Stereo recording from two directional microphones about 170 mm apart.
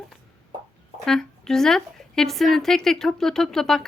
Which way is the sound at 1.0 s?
5° left (ahead or behind).